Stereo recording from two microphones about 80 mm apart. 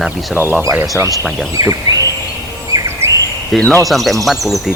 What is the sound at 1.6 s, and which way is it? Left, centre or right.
Speech, right.